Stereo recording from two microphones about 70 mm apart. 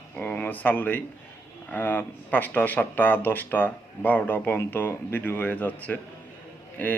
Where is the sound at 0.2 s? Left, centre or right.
Left.